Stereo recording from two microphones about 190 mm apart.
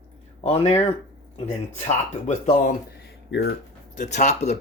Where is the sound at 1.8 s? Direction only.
40° left (ahead or behind); by 3.5 s 60° left (ahead or behind).